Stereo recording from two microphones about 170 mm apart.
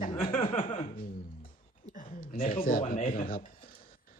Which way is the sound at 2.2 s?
60° left (ahead or behind).